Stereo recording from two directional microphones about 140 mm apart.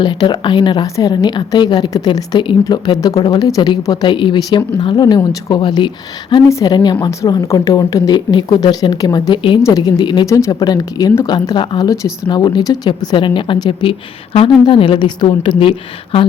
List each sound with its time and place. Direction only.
0.0 s speech: 35° left (ahead or behind)